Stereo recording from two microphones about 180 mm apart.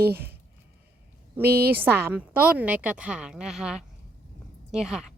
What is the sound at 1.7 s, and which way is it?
A woman's voice, 10° right (ahead or behind).